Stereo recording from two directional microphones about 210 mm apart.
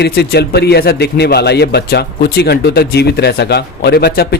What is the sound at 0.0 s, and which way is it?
A man's voice, 50° left (ahead or behind).